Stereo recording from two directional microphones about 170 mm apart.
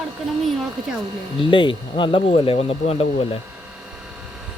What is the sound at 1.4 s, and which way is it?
Speech, 30° left (ahead or behind).